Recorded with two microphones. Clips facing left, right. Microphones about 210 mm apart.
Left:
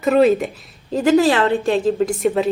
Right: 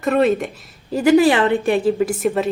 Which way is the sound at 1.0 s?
15° right (ahead or behind).